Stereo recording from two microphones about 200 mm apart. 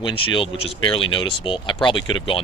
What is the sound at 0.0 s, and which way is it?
Speech, 25° left (ahead or behind).